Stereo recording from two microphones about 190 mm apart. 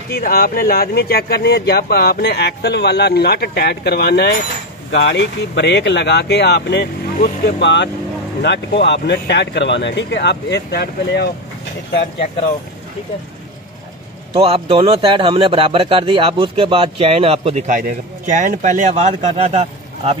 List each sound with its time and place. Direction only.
0.1 s speech: 50° left (ahead or behind)
14.3 s speech: 30° right (ahead or behind)